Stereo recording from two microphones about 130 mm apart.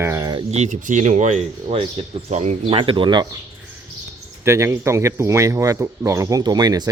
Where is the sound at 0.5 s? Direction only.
70° right (ahead or behind); by 3.2 s 35° right (ahead or behind).